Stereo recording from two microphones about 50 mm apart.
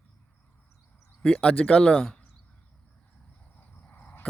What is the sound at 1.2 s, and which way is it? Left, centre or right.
Speech, centre.